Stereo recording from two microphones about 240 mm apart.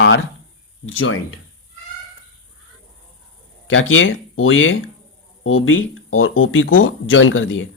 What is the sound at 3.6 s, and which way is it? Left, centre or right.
Speech, left.